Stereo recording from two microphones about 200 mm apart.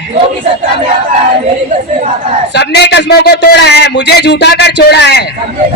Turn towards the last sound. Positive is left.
turn(degrees=55)  # may be behind; listen again after turning